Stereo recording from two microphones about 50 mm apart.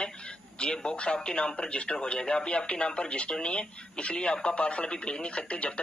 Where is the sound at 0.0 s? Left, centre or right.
Centre.